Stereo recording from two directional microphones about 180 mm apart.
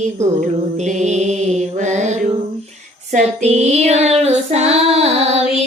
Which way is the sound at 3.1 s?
40° right (ahead or behind).